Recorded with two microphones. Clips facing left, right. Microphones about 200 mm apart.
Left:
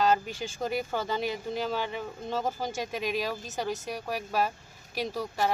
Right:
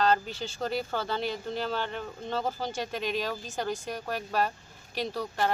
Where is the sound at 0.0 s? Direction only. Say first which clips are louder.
Even; 10° left (ahead or behind).